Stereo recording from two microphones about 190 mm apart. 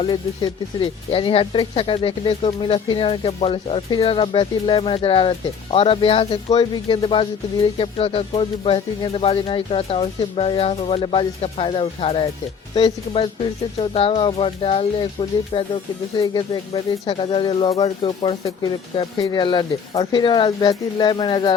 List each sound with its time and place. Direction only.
0.0 s speech: 25° left (ahead or behind)